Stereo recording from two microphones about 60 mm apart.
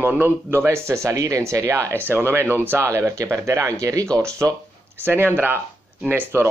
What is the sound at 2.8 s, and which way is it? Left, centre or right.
Speech, right.